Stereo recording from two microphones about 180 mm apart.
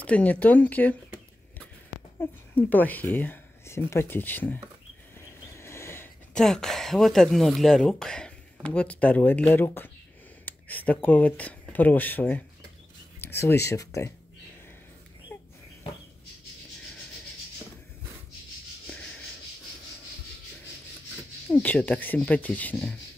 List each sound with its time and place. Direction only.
0.0 s speech: 10° left (ahead or behind)
2.1 s speech: 10° left (ahead or behind)
5.1 s a sound: 15° left (ahead or behind)
6.4 s speech: 5° left (ahead or behind)
15.3 s a sound: 10° left (ahead or behind)
21.5 s speech: 10° left (ahead or behind)